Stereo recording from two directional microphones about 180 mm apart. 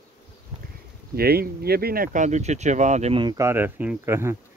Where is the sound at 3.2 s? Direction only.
15° right (ahead or behind).